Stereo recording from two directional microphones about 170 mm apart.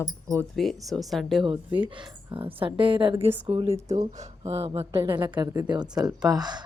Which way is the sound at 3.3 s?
10° right (ahead or behind).